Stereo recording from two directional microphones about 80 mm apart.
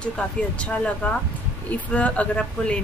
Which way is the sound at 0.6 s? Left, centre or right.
Centre.